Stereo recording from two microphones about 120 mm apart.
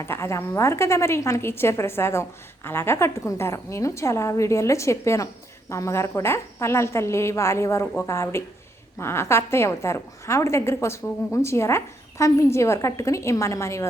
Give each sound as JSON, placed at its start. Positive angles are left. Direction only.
{"t": 0.0, "sound": "a woman's voice", "side_deg": 20}